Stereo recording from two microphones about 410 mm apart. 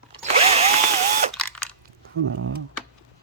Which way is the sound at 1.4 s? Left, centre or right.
Centre.